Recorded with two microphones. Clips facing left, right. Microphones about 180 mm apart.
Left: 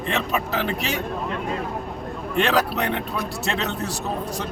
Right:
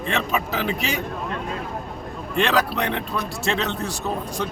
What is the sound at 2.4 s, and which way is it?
Speech, 5° left (ahead or behind).